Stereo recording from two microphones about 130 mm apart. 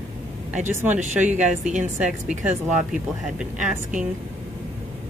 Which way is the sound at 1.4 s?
65° right (ahead or behind).